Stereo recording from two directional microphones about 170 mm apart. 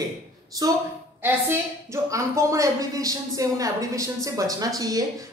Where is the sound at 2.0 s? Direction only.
20° right (ahead or behind).